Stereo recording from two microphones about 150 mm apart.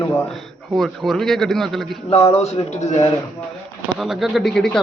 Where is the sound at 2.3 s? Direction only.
40° left (ahead or behind).